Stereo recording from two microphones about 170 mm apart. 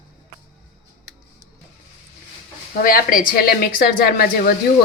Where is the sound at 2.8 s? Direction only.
60° left (ahead or behind).